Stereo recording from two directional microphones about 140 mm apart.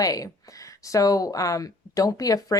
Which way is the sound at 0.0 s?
25° left (ahead or behind).